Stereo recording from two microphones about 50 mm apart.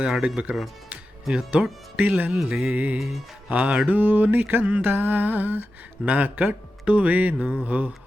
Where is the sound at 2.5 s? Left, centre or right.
Right.